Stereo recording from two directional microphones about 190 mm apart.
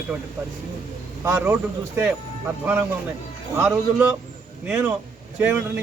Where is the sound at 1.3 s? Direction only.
10° right (ahead or behind).